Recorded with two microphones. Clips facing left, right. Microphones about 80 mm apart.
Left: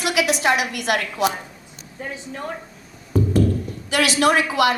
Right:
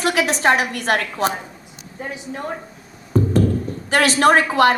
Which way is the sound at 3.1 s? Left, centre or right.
Right.